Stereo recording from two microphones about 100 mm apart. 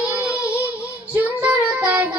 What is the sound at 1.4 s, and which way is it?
Child singing, 15° right (ahead or behind).